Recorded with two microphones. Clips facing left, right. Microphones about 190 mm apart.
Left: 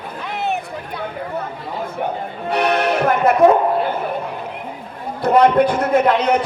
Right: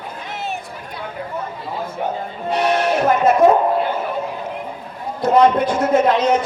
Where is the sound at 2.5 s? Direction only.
60° left (ahead or behind).